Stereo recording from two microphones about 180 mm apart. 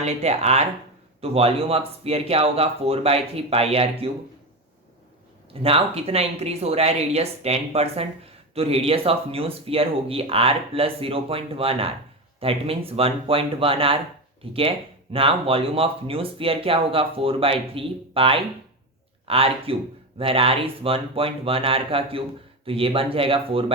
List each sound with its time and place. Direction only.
0.0 s speech: 35° right (ahead or behind)
5.6 s speech: 35° right (ahead or behind)